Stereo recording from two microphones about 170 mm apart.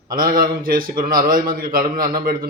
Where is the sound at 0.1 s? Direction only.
60° right (ahead or behind).